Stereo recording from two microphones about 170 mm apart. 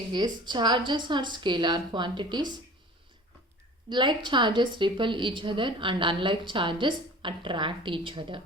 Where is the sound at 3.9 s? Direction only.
25° right (ahead or behind).